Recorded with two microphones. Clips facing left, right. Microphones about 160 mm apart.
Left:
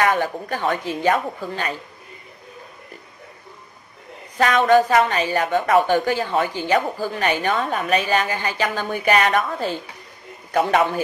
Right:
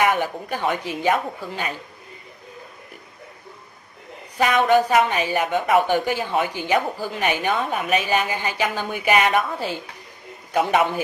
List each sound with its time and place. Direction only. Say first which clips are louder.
0.0 s a woman's voice: left 1 dB; 15° right (ahead or behind)
4.4 s a woman's voice: left 2 dB; 15° right (ahead or behind)